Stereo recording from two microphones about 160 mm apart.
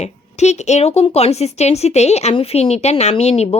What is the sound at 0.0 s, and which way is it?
A woman's voice, 45° left (ahead or behind).